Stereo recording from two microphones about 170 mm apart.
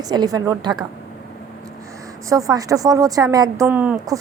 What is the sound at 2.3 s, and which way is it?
A woman's voice, 20° right (ahead or behind).